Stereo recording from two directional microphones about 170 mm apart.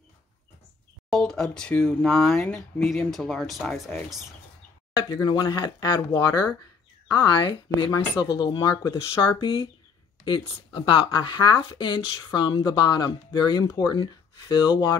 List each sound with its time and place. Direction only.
1.1 s speech: 5° left (ahead or behind)
4.9 s speech: 25° left (ahead or behind)